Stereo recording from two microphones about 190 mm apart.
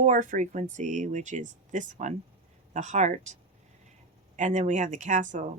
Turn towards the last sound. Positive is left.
turn(degrees=-40)  # may be behind; listen again after turning